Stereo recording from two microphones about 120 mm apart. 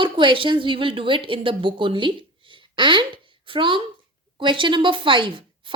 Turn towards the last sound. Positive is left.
turn(degrees=-45)  # may be behind; listen again after turning